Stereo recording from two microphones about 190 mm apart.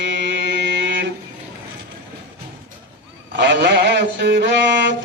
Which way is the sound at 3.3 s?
65° right (ahead or behind).